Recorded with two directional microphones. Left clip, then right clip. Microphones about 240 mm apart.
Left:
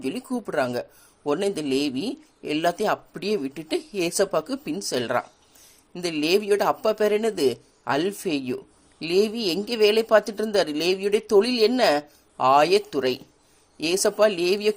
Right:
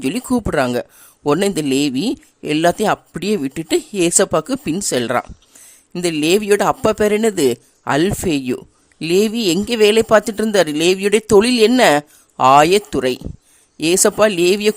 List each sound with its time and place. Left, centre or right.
0.0 s a man's voice: right
2.4 s a man's voice: right
3.3 s speech: right
3.9 s a man's voice: right
4.5 s speech: right
4.9 s a man's voice: right
9.4 s a man's voice: right
11.5 s a man's voice: right